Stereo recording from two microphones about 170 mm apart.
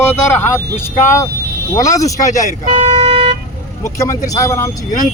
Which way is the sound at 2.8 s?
30° right (ahead or behind).